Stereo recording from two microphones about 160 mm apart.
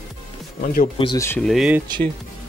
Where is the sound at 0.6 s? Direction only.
65° left (ahead or behind).